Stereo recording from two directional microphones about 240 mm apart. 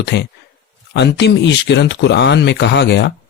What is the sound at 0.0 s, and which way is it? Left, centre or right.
Speech, left.